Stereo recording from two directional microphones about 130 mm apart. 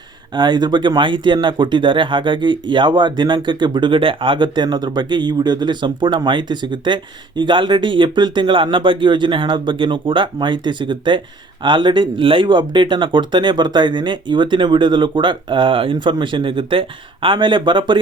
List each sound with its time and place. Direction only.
0.3 s speech: 30° right (ahead or behind)